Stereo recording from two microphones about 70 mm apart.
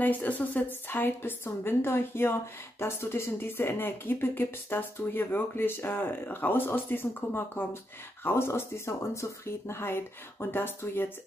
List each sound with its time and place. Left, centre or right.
0.0 s a woman's voice: left